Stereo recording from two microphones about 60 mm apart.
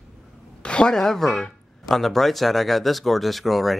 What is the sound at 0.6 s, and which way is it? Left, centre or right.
Speech, centre.